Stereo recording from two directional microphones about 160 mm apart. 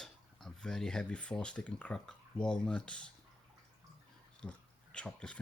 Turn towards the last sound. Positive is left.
turn(degrees=5)  # may be behind; listen again after turning